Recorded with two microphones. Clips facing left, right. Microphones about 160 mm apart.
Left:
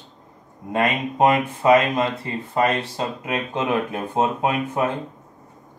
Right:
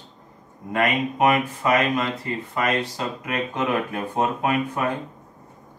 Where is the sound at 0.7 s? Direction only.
25° left (ahead or behind).